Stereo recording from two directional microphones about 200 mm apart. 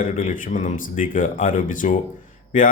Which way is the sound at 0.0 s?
40° left (ahead or behind).